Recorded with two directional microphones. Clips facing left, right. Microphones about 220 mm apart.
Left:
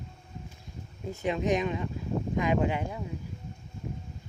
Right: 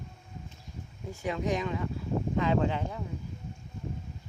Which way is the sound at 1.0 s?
20° left (ahead or behind).